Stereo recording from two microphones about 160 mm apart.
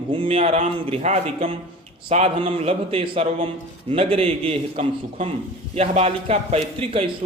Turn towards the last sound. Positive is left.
turn(degrees=-35)  # may be behind; listen again after turning